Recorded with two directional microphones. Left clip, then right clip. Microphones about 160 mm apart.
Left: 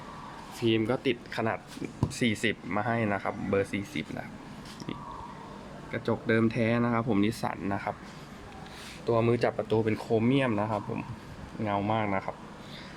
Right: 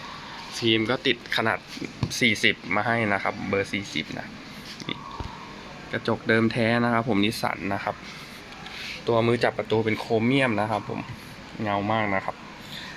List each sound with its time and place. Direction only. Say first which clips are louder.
0.6 s speech: right 4 dB; 10° left (ahead or behind)
3.5 s speech: even; 20° left (ahead or behind)
5.9 s speech: right 5 dB; centre (ahead or behind)
9.0 s speech: right 4 dB; centre (ahead or behind)